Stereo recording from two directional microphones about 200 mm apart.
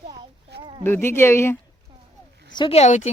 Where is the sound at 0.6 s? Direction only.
25° right (ahead or behind).